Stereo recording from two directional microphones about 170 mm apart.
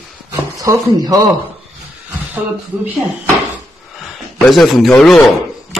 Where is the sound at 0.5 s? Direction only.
20° right (ahead or behind).